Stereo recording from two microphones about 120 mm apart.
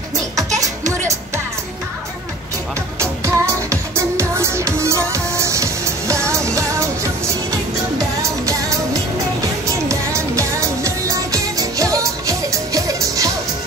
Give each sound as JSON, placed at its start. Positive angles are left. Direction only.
{"t": 0.6, "sound": "music", "side_deg": -25}
{"t": 3.0, "sound": "music", "side_deg": -25}
{"t": 8.2, "sound": "music", "side_deg": -30}